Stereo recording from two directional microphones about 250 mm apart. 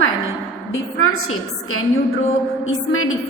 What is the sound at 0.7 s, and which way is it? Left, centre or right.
Speech, left.